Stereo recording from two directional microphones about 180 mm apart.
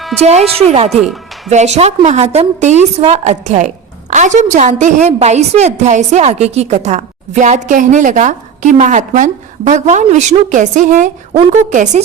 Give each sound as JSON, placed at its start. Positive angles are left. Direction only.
{"t": 0.2, "sound": "a woman's voice", "side_deg": -35}